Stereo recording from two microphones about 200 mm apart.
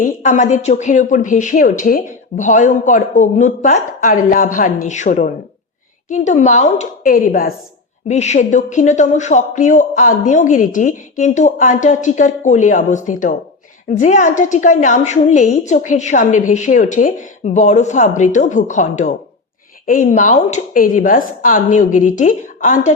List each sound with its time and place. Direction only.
0.0 s a woman's voice: 40° left (ahead or behind)